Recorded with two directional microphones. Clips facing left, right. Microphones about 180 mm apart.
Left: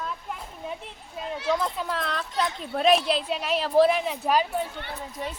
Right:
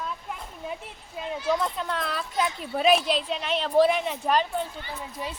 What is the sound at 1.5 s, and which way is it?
A woman's voice, centre (ahead or behind).